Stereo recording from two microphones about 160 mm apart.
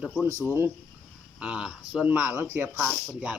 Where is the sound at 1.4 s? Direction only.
5° right (ahead or behind).